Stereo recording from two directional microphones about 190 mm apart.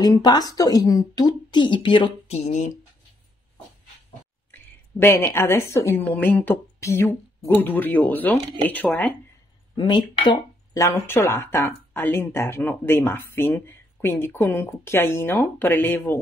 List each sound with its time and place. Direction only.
0.0 s speech: 20° left (ahead or behind); by 2.7 s 40° left (ahead or behind)
4.5 s a woman's voice: 10° left (ahead or behind)
9.8 s speech: 25° left (ahead or behind)